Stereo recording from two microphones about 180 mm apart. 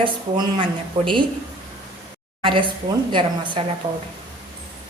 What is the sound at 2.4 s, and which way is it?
A woman's voice, 25° right (ahead or behind).